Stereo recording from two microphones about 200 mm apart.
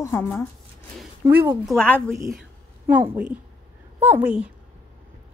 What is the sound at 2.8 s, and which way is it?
A woman's voice, 10° right (ahead or behind).